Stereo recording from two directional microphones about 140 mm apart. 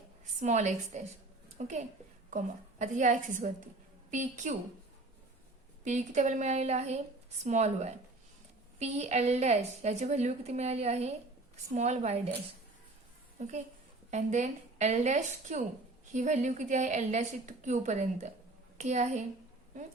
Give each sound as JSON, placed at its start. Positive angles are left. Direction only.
{"t": 0.3, "sound": "a woman's voice", "side_deg": -60}
{"t": 5.8, "sound": "a woman's voice", "side_deg": -60}
{"t": 14.1, "sound": "a woman's voice", "side_deg": -55}